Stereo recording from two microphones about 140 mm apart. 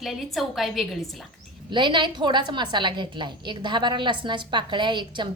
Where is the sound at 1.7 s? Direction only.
35° right (ahead or behind).